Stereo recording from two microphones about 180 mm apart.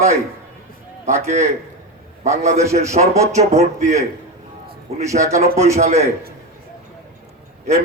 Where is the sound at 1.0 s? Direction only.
40° right (ahead or behind).